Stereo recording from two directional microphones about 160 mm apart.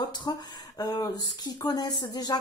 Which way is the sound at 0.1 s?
30° left (ahead or behind).